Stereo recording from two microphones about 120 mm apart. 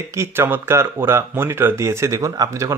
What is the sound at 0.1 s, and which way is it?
Speech, 20° right (ahead or behind).